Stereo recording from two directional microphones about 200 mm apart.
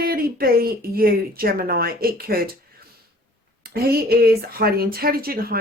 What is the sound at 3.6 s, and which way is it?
Speech, 50° right (ahead or behind).